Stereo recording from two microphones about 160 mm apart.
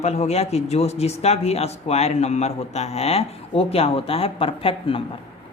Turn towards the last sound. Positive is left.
turn(degrees=35)  # may be behind; listen again after turning